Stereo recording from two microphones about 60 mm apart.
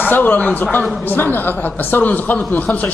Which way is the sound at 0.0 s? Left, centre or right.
Left.